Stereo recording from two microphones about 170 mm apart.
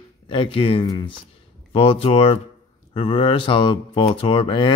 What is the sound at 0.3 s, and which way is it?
Speech, 30° left (ahead or behind).